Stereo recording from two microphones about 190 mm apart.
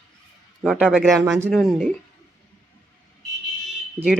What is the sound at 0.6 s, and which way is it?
Speech, 5° right (ahead or behind).